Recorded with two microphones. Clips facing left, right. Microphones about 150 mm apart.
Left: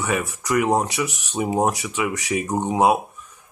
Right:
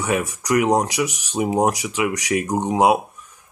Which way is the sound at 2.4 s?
10° right (ahead or behind).